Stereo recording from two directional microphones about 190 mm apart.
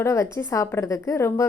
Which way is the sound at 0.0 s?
15° left (ahead or behind).